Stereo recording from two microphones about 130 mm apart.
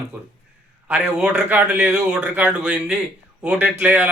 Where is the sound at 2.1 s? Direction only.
5° right (ahead or behind).